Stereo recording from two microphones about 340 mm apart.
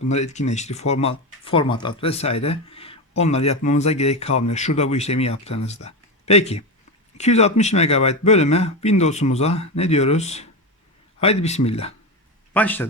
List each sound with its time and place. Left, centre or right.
0.1 s speech: centre
12.5 s speech: centre